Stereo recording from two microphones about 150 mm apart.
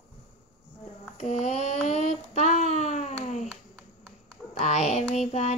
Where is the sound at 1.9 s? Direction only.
50° left (ahead or behind).